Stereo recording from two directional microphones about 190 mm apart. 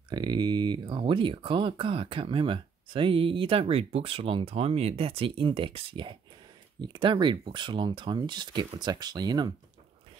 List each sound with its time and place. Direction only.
0.1 s speech: 25° right (ahead or behind)